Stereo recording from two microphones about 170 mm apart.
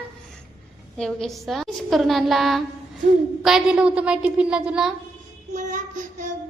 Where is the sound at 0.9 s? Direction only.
Centre (ahead or behind).